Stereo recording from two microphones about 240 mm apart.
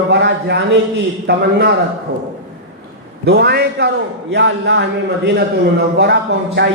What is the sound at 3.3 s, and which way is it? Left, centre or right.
A man's voice, right.